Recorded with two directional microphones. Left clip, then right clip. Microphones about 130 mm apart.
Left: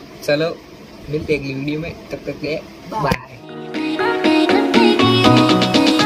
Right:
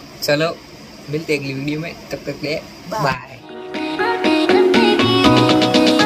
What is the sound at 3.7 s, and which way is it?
Music, centre (ahead or behind).